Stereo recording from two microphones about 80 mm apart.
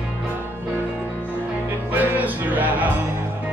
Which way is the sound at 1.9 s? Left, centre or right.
Right.